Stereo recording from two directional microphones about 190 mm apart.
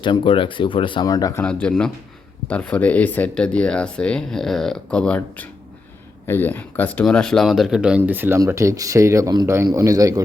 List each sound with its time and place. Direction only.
0.0 s speech: 25° left (ahead or behind)
1.5 s speech: 5° left (ahead or behind); by 10.2 s 20° right (ahead or behind)